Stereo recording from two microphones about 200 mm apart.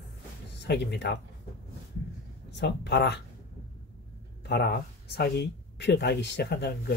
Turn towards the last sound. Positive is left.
turn(degrees=55)  # may be behind; listen again after turning